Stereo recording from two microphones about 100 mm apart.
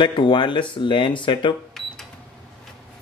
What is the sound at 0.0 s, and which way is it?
Speech, 50° left (ahead or behind).